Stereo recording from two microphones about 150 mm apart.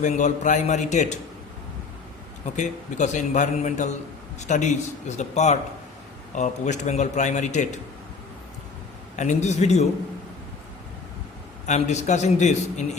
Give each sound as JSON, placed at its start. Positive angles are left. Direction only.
{"t": 0.0, "sound": "a man's voice", "side_deg": 55}
{"t": 2.6, "sound": "a man's voice", "side_deg": 55}
{"t": 9.1, "sound": "a man's voice", "side_deg": 50}
{"t": 11.6, "sound": "a man's voice", "side_deg": 50}